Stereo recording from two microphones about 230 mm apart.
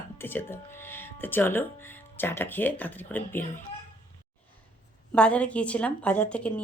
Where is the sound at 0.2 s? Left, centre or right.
Centre.